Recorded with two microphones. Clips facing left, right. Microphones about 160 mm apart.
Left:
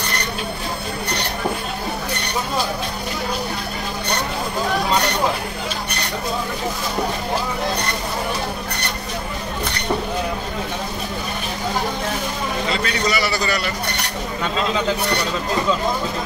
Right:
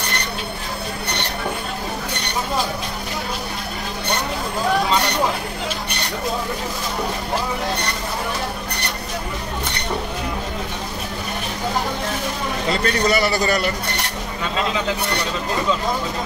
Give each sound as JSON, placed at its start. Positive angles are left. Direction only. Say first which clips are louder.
{"t": 12.8, "sound": "a man's voice", "louder": "right 3 dB", "side_deg": -50}